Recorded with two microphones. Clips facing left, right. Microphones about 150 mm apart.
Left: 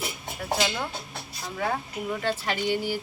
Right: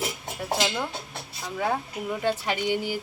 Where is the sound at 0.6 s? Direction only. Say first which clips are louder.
Right 1 dB; centre (ahead or behind).